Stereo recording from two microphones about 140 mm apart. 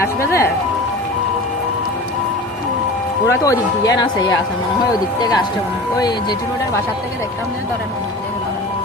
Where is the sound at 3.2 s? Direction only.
25° left (ahead or behind).